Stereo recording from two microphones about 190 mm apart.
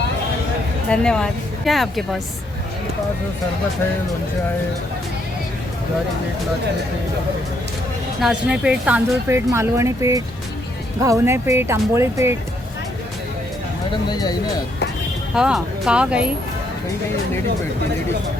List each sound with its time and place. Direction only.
0.9 s speech: 5° left (ahead or behind)
8.2 s speech: 5° right (ahead or behind)
13.9 s speech: 20° left (ahead or behind)
15.4 s speech: centre (ahead or behind)